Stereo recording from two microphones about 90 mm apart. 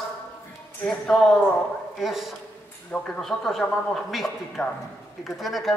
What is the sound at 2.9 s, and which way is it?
Speech, 15° left (ahead or behind).